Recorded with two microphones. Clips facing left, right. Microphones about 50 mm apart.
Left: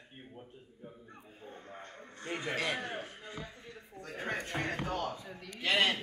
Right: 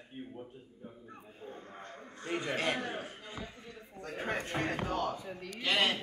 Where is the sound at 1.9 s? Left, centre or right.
Centre.